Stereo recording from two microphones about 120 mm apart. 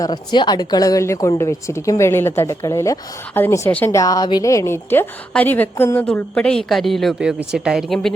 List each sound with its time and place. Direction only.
0.0 s a woman's voice: 35° left (ahead or behind)
3.7 s a woman's voice: 15° left (ahead or behind)
3.9 s a woman's voice: 30° left (ahead or behind)
6.1 s a woman's voice: 5° left (ahead or behind)